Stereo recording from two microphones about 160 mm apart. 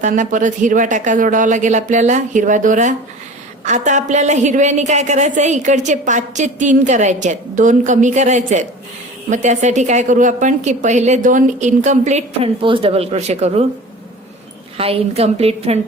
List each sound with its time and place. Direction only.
0.0 s a woman's voice: 55° right (ahead or behind)
14.8 s a woman's voice: 40° right (ahead or behind)